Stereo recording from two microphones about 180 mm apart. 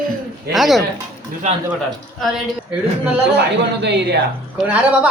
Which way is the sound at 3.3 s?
70° right (ahead or behind).